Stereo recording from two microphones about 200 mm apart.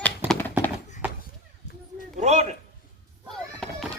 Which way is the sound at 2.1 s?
35° right (ahead or behind).